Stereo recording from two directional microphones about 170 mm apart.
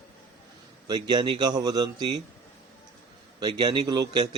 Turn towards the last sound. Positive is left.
turn(degrees=-25)  # may be behind; listen again after turning